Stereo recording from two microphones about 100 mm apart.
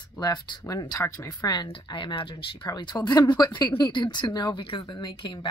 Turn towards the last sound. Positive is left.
turn(degrees=55)  # may be behind; listen again after turning